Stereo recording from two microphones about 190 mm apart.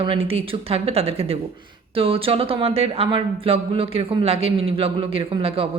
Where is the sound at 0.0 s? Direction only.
30° right (ahead or behind).